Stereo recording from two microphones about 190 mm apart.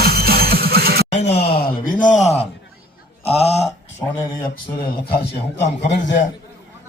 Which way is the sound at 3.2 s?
30° left (ahead or behind).